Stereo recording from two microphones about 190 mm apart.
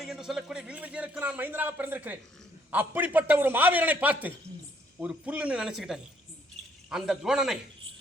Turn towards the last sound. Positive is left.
turn(degrees=0)  # may be behind; listen again after turning